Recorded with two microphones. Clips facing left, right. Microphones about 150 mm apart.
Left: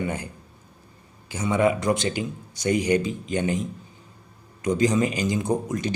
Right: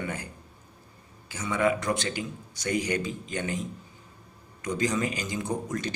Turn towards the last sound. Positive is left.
turn(degrees=15)  # may be behind; listen again after turning